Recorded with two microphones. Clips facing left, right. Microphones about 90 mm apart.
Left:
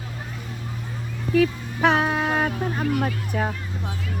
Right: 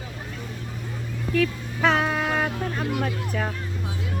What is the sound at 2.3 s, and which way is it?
Vehicle, 20° left (ahead or behind).